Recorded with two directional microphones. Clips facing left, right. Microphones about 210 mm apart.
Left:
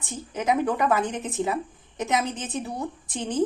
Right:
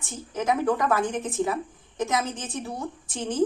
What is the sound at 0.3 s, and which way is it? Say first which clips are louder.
A woman's voice: even; 15° left (ahead or behind).